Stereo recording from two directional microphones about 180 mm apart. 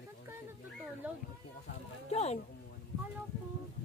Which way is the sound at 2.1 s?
35° left (ahead or behind).